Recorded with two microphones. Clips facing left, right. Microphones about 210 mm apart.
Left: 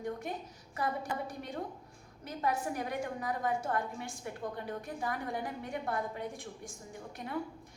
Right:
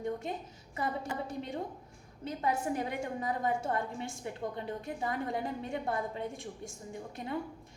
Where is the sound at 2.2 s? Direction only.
25° right (ahead or behind).